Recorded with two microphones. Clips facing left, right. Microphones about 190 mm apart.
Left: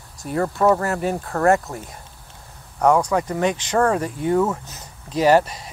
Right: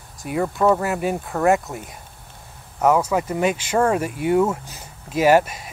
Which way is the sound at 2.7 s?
5° right (ahead or behind).